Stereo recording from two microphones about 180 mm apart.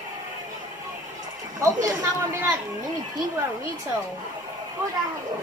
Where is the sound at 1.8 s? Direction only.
15° right (ahead or behind).